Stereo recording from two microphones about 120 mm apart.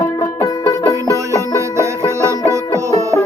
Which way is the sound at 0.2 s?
25° left (ahead or behind).